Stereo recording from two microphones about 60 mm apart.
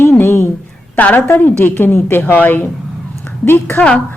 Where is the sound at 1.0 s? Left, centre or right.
Left.